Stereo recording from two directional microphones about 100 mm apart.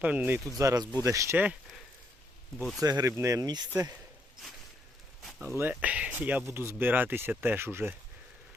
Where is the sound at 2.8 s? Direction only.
40° right (ahead or behind).